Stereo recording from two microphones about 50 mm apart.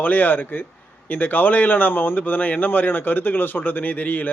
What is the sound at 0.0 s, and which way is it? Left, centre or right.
Speech, left.